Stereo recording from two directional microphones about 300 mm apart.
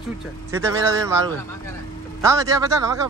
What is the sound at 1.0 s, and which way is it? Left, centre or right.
A man's voice, centre.